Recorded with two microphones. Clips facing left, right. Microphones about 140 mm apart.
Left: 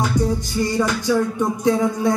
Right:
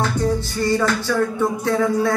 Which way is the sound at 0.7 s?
15° left (ahead or behind).